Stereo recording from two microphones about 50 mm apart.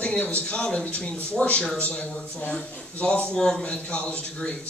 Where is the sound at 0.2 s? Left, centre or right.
Left.